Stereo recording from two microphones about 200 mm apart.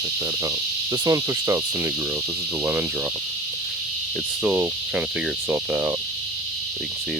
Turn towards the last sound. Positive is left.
turn(degrees=-10)  # may be behind; listen again after turning